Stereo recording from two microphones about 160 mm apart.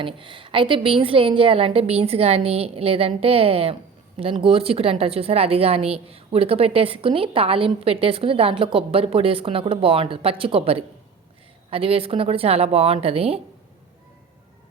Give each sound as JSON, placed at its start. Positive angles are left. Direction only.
{"t": 0.0, "sound": "a woman's voice", "side_deg": -35}